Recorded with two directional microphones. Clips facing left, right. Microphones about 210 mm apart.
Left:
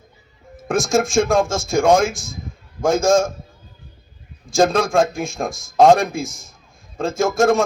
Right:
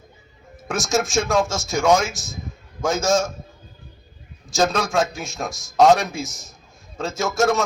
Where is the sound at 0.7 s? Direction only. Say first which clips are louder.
Left 4 dB; 55° left (ahead or behind).